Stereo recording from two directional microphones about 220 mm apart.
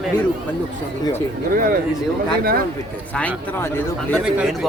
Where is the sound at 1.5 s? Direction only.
40° right (ahead or behind).